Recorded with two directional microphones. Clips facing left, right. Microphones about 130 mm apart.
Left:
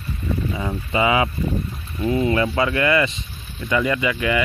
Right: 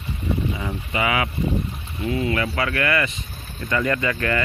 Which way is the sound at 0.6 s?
25° left (ahead or behind).